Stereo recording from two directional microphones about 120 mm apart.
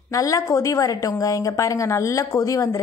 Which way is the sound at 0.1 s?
30° left (ahead or behind).